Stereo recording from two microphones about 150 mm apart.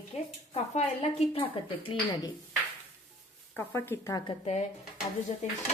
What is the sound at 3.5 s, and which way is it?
Speech, 15° left (ahead or behind).